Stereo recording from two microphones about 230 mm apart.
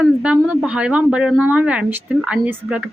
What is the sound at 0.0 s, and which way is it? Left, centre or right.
A woman's voice, centre.